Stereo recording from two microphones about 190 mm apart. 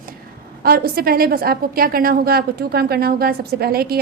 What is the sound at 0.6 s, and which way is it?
A woman's voice, 50° right (ahead or behind).